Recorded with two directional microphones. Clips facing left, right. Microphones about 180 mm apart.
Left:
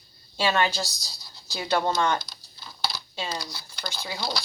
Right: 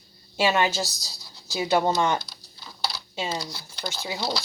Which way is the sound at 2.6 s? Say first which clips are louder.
Even; centre (ahead or behind).